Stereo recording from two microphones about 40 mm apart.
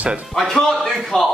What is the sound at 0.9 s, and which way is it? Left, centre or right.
Speech, centre.